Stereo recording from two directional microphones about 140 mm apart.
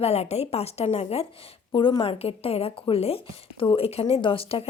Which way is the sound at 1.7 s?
35° left (ahead or behind).